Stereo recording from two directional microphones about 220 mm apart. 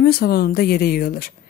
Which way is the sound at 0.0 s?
45° left (ahead or behind).